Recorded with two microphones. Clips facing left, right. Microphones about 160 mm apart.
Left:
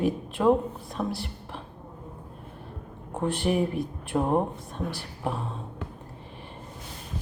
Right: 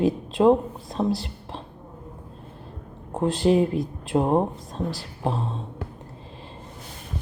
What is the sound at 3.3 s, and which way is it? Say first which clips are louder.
Speech: right 6 dB; 90° right.